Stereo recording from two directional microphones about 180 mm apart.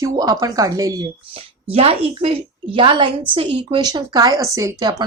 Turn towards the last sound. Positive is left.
turn(degrees=-20)  # may be behind; listen again after turning